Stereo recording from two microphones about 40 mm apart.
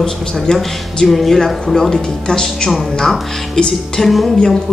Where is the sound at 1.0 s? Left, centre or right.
Centre.